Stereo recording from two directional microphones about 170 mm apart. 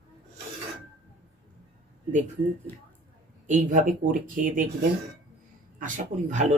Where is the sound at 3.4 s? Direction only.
50° right (ahead or behind).